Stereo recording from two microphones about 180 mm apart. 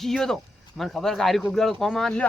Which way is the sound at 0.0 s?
Centre (ahead or behind).